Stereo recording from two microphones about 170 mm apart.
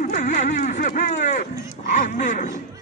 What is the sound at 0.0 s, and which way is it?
Speech, 50° left (ahead or behind).